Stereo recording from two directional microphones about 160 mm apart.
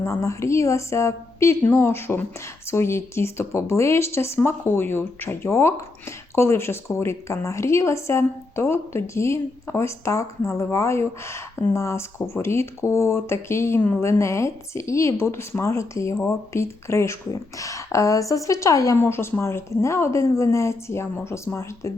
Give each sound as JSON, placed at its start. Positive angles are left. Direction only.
{"t": 0.0, "sound": "a woman's voice", "side_deg": 20}